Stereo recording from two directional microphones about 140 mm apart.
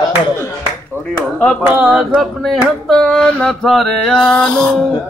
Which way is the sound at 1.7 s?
5° right (ahead or behind).